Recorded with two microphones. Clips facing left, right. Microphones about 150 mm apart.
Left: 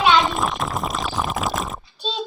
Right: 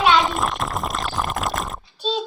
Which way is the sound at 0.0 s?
Centre (ahead or behind).